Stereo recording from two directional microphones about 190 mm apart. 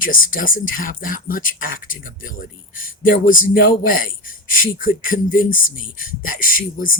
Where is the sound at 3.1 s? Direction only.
45° left (ahead or behind).